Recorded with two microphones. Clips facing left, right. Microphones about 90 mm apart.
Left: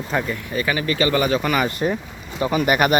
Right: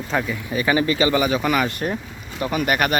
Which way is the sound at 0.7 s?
20° right (ahead or behind).